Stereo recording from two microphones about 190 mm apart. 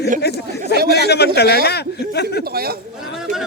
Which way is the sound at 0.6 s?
55° right (ahead or behind).